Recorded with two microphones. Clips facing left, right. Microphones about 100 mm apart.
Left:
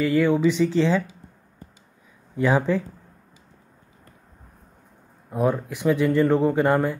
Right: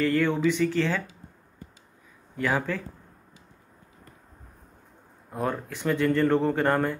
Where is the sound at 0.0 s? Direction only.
10° left (ahead or behind).